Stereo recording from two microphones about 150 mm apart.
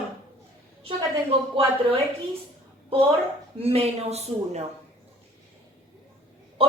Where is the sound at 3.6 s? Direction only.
40° right (ahead or behind).